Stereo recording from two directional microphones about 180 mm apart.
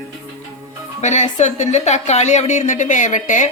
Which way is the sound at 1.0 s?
40° left (ahead or behind).